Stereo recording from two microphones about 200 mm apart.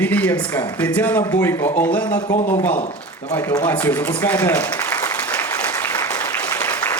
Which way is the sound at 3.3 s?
10° left (ahead or behind).